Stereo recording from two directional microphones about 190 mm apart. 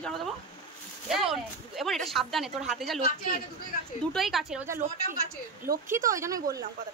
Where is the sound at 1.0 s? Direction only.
Centre (ahead or behind).